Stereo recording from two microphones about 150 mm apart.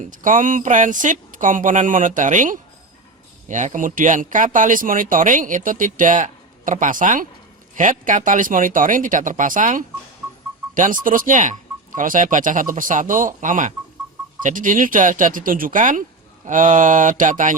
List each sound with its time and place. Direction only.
0.0 s speech: 60° right (ahead or behind)